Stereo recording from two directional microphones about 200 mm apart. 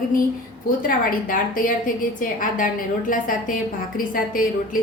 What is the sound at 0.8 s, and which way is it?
A woman's voice, 45° left (ahead or behind).